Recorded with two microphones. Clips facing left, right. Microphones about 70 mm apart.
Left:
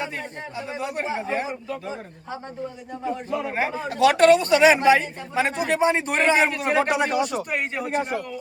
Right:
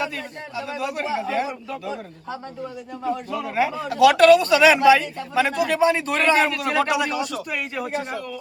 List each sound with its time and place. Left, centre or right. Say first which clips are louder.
0.5 s speech: right 2 dB; left
3.3 s speech: right 1 dB; left